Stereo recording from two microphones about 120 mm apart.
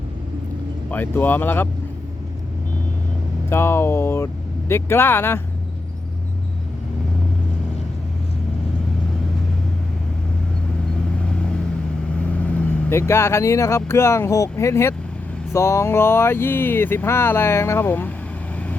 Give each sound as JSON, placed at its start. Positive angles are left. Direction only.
{"t": 0.9, "sound": "speech", "side_deg": 15}
{"t": 3.5, "sound": "speech", "side_deg": 20}
{"t": 12.4, "sound": "speech", "side_deg": 10}